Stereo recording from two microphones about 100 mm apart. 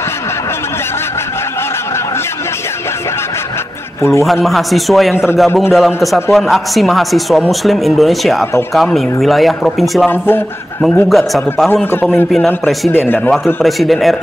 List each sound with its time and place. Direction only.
4.0 s a man's voice: 30° left (ahead or behind)
4.3 s a man's voice: centre (ahead or behind)
5.1 s a man's voice: 25° left (ahead or behind)
5.8 s a man's voice: centre (ahead or behind)
10.0 s a man's voice: 20° left (ahead or behind)
11.1 s a man's voice: centre (ahead or behind)
11.7 s a man's voice: 20° left (ahead or behind)
13.6 s a man's voice: centre (ahead or behind)